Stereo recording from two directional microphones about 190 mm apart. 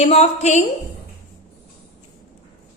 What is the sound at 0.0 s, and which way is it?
Speech, 35° left (ahead or behind).